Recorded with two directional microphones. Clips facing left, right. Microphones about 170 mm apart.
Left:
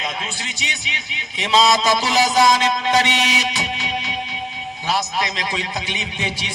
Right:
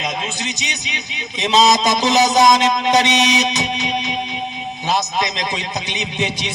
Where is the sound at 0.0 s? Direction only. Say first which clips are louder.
Right 4 dB; 20° right (ahead or behind).